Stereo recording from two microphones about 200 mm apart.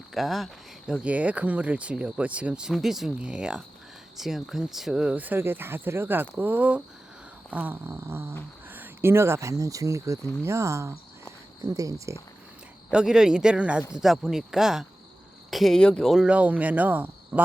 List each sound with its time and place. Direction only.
0.1 s speech: centre (ahead or behind)
12.9 s speech: 5° right (ahead or behind)